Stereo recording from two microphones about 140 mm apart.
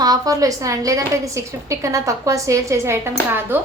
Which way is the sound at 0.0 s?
25° right (ahead or behind).